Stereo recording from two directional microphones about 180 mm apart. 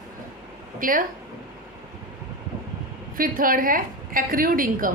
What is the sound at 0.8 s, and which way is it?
Speech, 50° right (ahead or behind).